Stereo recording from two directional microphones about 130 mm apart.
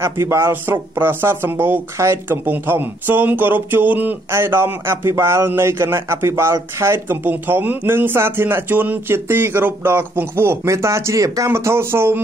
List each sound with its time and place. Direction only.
0.0 s a man's voice: 20° right (ahead or behind)